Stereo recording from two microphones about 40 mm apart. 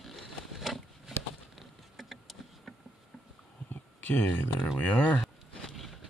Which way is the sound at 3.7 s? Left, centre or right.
Left.